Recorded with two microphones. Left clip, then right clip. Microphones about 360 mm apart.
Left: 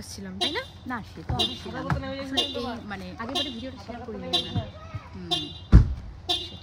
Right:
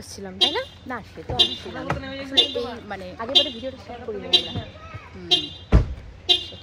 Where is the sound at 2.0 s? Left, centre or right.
Left.